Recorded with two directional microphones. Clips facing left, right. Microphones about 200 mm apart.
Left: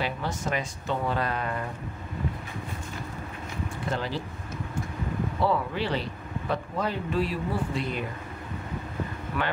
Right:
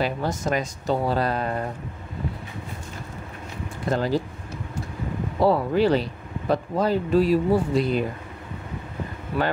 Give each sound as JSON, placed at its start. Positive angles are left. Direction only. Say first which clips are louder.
{"t": 0.0, "sound": "speech", "louder": "right 5 dB", "side_deg": -40}
{"t": 3.9, "sound": "speech", "louder": "right 9 dB", "side_deg": -40}
{"t": 5.4, "sound": "speech", "louder": "right 8 dB", "side_deg": -40}